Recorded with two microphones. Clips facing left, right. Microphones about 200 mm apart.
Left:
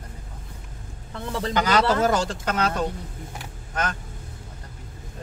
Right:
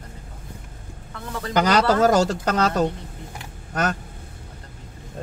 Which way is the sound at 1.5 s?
45° right (ahead or behind).